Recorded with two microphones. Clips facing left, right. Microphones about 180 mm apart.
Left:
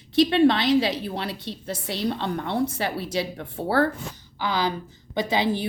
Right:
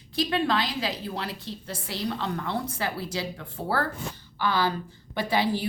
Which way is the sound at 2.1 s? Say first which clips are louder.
Left 3 dB; 25° left (ahead or behind).